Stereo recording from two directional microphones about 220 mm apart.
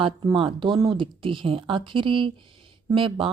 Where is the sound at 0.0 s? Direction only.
25° right (ahead or behind).